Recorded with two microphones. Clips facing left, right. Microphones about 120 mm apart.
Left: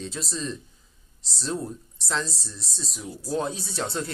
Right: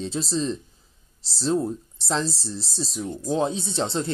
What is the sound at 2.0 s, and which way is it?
Speech, 30° right (ahead or behind).